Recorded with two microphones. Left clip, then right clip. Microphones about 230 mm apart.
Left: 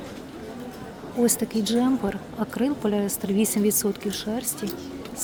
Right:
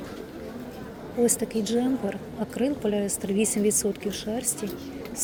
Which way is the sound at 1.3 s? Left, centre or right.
Left.